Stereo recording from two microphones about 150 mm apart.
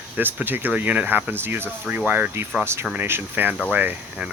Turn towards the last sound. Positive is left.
turn(degrees=-10)  # may be behind; listen again after turning